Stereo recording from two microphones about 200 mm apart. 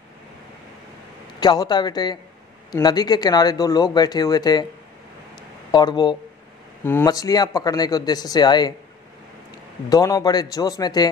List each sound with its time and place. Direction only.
1.4 s speech: 20° left (ahead or behind)
5.7 s speech: 20° left (ahead or behind)
9.8 s speech: 15° left (ahead or behind)